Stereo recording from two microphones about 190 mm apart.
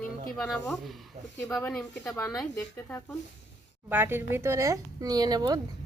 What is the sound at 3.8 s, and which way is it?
Speech, 10° right (ahead or behind).